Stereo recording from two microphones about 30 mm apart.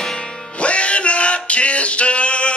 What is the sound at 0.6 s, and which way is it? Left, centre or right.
Male singing, left.